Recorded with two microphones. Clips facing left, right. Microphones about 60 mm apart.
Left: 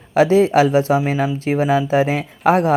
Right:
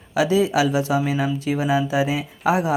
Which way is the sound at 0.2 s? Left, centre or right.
Left.